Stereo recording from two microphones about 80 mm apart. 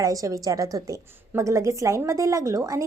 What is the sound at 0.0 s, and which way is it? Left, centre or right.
Speech, right.